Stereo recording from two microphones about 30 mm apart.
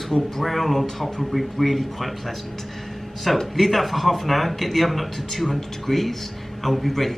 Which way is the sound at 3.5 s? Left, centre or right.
Centre.